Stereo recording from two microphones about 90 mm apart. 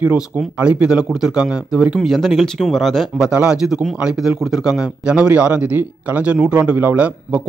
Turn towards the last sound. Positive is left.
turn(degrees=-20)  # may be behind; listen again after turning